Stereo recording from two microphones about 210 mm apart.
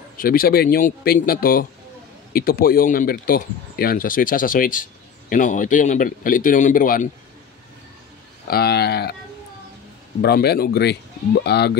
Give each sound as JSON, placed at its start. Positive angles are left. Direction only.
{"t": 0.2, "sound": "a man's voice", "side_deg": 45}
{"t": 8.5, "sound": "speech", "side_deg": 50}
{"t": 10.2, "sound": "speech", "side_deg": 50}